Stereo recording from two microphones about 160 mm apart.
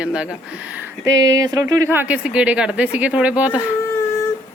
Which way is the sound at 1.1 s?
20° right (ahead or behind).